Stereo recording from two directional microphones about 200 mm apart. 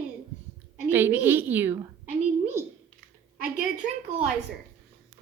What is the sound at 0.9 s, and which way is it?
A woman's voice, 10° right (ahead or behind).